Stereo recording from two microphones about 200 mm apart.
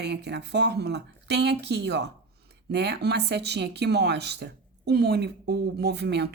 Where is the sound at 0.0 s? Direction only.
60° right (ahead or behind).